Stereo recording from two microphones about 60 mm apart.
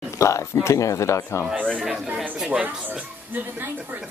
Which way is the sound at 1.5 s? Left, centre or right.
Right.